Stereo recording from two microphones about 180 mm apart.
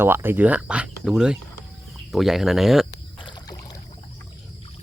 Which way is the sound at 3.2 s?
20° left (ahead or behind).